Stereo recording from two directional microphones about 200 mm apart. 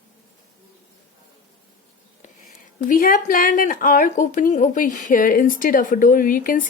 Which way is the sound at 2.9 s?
45° left (ahead or behind).